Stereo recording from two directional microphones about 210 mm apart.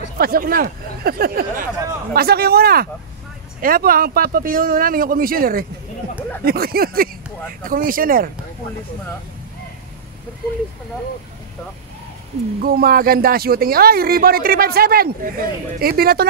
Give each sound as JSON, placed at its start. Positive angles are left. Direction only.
{"t": 0.2, "sound": "speech", "side_deg": -45}
{"t": 12.6, "sound": "speech", "side_deg": -45}